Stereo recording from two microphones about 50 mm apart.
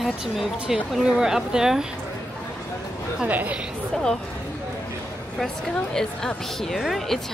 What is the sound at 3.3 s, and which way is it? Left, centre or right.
Speech, right.